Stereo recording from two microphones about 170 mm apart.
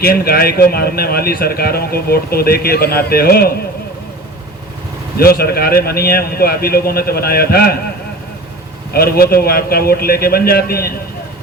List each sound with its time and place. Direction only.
0.0 s speech: 65° left (ahead or behind)
5.1 s speech: 60° left (ahead or behind)
8.9 s speech: 65° left (ahead or behind)